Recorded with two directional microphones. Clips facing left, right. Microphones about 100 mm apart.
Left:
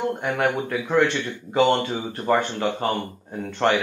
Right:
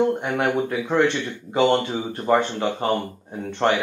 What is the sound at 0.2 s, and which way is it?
Speech, 20° right (ahead or behind).